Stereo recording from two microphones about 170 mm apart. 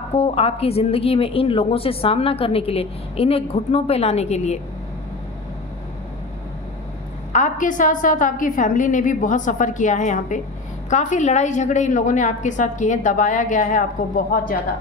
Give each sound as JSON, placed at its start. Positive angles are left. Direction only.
{"t": 0.2, "sound": "speech", "side_deg": 35}
{"t": 7.3, "sound": "a woman's voice", "side_deg": 50}